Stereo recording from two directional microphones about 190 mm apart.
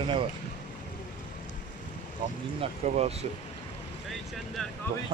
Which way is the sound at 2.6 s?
35° right (ahead or behind).